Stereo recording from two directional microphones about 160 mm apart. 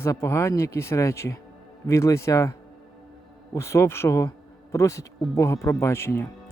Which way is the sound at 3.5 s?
15° left (ahead or behind).